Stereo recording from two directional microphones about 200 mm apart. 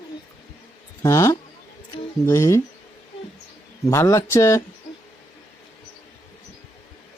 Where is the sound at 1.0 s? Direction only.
15° left (ahead or behind).